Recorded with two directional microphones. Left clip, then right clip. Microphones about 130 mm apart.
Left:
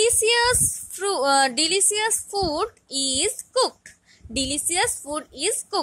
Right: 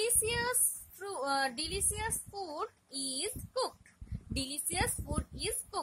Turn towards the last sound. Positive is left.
turn(degrees=35)  # may be behind; listen again after turning